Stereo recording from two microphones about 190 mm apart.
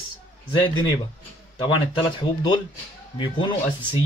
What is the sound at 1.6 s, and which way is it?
Speech, 25° left (ahead or behind).